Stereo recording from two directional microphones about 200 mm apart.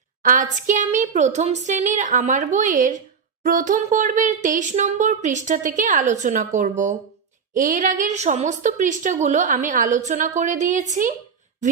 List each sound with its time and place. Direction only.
0.2 s a woman's voice: 40° right (ahead or behind)